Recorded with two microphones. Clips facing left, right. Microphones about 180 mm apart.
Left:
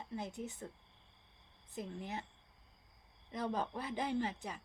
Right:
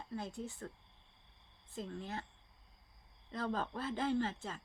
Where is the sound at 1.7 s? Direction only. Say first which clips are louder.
Even; 20° left (ahead or behind).